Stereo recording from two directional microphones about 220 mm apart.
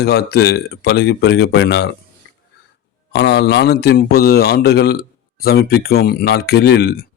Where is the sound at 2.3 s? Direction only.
50° left (ahead or behind).